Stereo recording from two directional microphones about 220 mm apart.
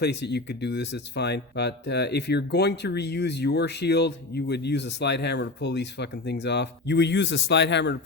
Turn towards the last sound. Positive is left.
turn(degrees=50)  # may be behind; listen again after turning